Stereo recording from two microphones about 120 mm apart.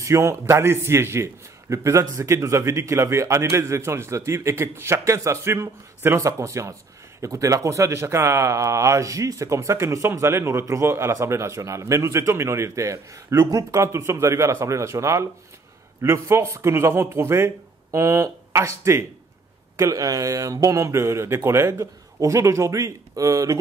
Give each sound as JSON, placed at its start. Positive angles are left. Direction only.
{"t": 0.0, "sound": "a man's voice", "side_deg": -25}